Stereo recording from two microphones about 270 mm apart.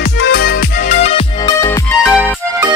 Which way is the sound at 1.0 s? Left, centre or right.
Left.